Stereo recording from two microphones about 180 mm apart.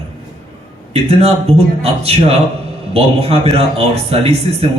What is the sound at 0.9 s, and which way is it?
A man's voice, 35° right (ahead or behind).